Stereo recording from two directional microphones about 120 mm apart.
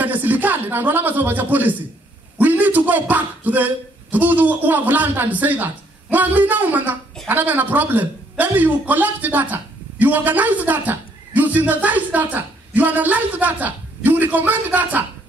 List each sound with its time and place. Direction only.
0.0 s a man's voice: 15° right (ahead or behind)